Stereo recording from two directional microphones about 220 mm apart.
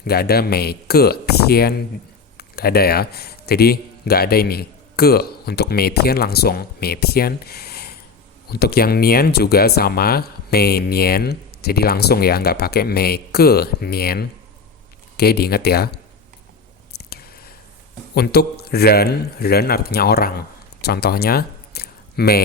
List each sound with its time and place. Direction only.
0.0 s a man's voice: 45° left (ahead or behind)
16.9 s a sound: 45° left (ahead or behind)
18.1 s speech: 45° left (ahead or behind)